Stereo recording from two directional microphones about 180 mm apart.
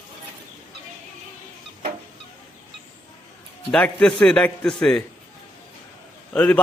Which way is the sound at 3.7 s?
5° left (ahead or behind).